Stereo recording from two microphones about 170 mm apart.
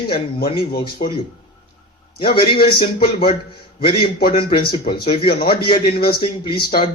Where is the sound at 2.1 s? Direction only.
65° left (ahead or behind).